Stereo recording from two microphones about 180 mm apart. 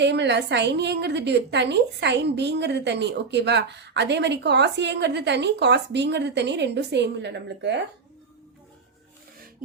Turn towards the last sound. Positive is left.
turn(degrees=-75)  # may be behind; listen again after turning